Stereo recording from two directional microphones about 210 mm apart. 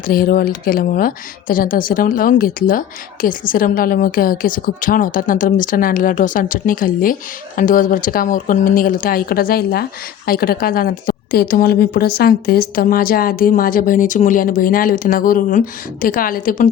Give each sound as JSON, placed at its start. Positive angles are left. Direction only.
{"t": 0.1, "sound": "a woman's voice", "side_deg": 45}